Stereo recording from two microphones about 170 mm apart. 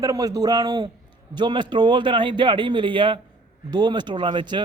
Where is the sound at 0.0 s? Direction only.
20° right (ahead or behind).